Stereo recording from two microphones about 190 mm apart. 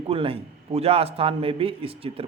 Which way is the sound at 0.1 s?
30° right (ahead or behind).